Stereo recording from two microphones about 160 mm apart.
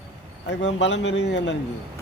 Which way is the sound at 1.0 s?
90° left.